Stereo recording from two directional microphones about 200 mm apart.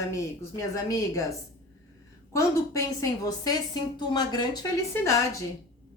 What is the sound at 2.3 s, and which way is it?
A woman's voice, 15° left (ahead or behind).